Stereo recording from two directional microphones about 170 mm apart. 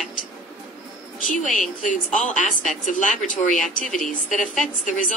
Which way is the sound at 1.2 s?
50° left (ahead or behind).